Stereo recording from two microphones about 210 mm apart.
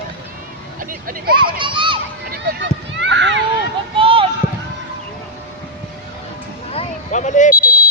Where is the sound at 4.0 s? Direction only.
25° right (ahead or behind).